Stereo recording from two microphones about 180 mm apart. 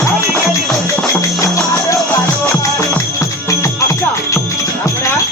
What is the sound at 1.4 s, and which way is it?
Music, 15° left (ahead or behind).